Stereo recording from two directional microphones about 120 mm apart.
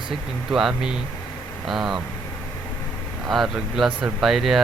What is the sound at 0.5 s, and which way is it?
Speech, 5° right (ahead or behind).